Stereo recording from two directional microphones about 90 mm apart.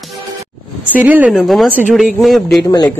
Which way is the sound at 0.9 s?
15° right (ahead or behind).